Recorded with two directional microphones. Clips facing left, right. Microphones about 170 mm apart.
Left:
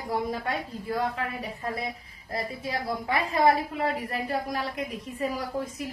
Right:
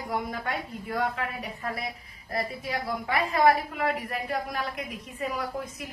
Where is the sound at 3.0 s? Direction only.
30° left (ahead or behind).